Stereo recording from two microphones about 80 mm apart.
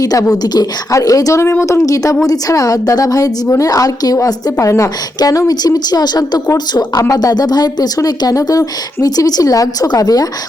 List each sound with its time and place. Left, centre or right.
0.0 s speech: left